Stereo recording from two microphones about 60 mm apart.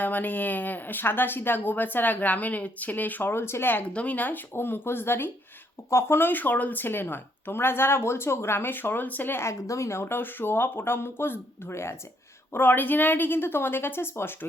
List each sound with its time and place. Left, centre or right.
0.0 s speech: left
4.5 s speech: left
9.5 s speech: left
12.5 s speech: left